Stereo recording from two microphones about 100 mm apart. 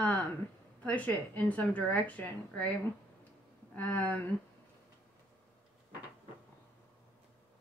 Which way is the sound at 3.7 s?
15° left (ahead or behind).